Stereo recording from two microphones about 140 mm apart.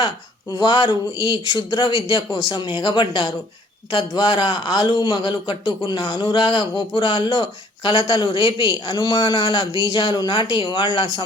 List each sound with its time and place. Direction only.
0.5 s a man's voice: 30° left (ahead or behind)